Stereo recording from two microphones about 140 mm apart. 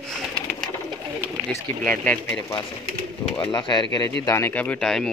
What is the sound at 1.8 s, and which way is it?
Speech, 10° left (ahead or behind).